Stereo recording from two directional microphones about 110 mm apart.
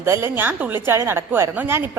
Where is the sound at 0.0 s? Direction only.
20° right (ahead or behind).